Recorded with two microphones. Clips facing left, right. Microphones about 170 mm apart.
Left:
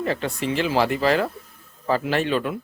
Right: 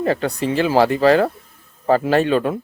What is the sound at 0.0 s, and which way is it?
Speech, 40° right (ahead or behind).